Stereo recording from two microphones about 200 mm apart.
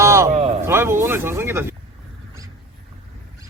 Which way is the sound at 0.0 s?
15° right (ahead or behind).